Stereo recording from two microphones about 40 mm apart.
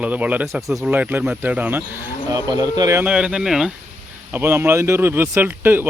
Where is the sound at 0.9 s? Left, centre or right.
Right.